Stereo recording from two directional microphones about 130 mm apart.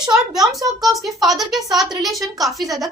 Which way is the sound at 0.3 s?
30° right (ahead or behind).